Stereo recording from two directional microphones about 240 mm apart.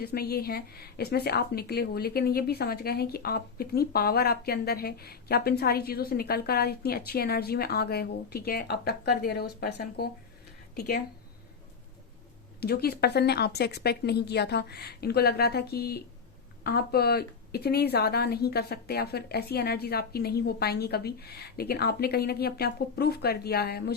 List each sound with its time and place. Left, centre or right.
0.0 s a woman's voice: left
12.5 s a woman's voice: left